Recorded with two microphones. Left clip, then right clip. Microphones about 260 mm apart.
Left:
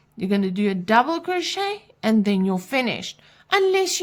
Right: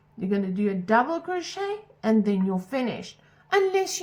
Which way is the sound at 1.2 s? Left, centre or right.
Left.